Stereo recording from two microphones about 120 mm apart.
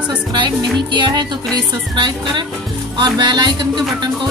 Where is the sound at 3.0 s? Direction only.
40° right (ahead or behind).